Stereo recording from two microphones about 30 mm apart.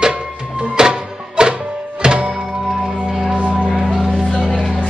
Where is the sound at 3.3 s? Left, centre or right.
Right.